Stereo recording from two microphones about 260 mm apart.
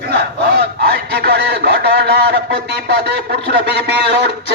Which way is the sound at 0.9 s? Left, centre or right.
Right.